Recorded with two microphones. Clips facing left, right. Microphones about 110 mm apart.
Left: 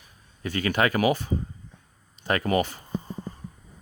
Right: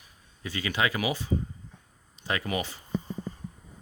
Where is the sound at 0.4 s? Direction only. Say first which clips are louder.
Left 5 dB; 50° left (ahead or behind).